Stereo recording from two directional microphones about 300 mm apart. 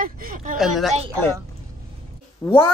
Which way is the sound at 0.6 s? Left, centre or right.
Centre.